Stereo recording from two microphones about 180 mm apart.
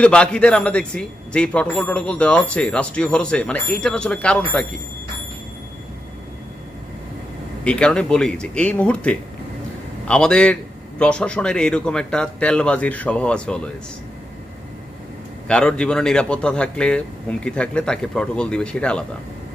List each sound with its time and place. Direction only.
0.0 s speech: 5° left (ahead or behind)
7.6 s speech: 5° left (ahead or behind)
15.4 s speech: 5° left (ahead or behind)